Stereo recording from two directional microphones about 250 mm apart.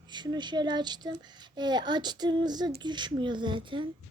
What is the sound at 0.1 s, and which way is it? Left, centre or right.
Speech, centre.